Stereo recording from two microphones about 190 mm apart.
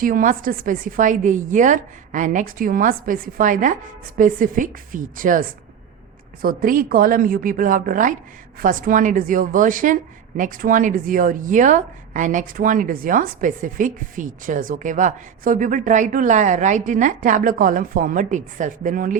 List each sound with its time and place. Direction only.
0.0 s a woman's voice: 45° right (ahead or behind)